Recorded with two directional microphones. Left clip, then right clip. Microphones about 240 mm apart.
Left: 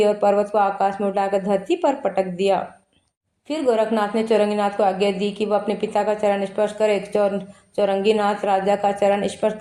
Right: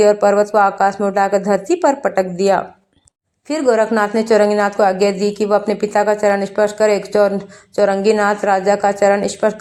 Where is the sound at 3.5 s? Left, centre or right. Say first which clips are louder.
Right 5 dB; right.